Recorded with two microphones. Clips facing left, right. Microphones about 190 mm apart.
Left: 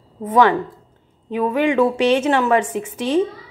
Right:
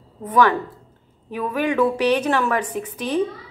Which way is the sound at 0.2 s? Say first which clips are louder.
Left 3 dB; 25° left (ahead or behind).